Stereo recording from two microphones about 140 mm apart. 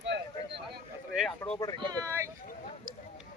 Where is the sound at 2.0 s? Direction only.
20° right (ahead or behind).